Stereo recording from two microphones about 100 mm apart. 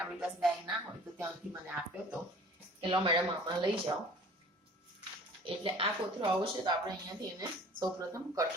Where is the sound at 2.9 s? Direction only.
50° right (ahead or behind).